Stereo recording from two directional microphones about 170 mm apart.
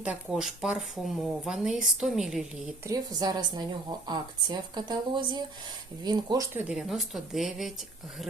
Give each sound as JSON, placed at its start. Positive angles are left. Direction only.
{"t": 0.0, "sound": "speech", "side_deg": -5}
{"t": 2.8, "sound": "a woman's voice", "side_deg": -20}
{"t": 6.5, "sound": "speech", "side_deg": -10}